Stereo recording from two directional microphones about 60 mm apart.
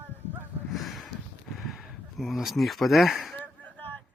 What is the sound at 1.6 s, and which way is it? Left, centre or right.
Speech, centre.